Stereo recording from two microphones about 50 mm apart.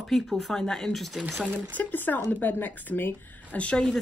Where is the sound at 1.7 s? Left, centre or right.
Left.